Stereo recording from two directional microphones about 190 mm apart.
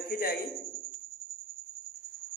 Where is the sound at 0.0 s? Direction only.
50° left (ahead or behind).